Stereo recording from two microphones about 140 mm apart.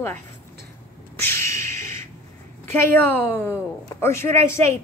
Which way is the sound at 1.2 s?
15° left (ahead or behind).